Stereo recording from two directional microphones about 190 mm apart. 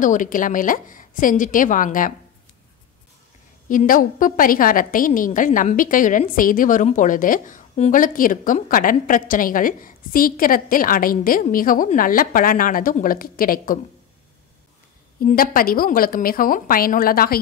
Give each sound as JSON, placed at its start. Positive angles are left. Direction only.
{"t": 0.0, "sound": "a woman's voice", "side_deg": 45}
{"t": 3.6, "sound": "a woman's voice", "side_deg": 45}
{"t": 15.1, "sound": "a woman's voice", "side_deg": 50}